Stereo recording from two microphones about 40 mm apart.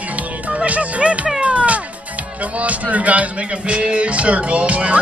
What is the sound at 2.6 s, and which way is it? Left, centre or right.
Speech, right.